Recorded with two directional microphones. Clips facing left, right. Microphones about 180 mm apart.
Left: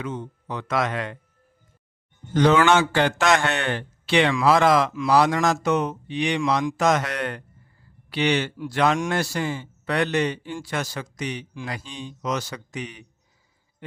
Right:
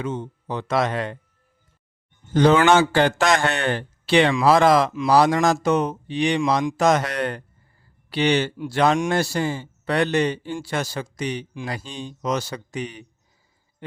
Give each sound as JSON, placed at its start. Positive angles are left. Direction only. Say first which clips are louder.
{"t": 0.0, "sound": "a man's voice", "louder": "right 3 dB", "side_deg": -25}
{"t": 2.3, "sound": "a man's voice", "louder": "right 2 dB", "side_deg": -30}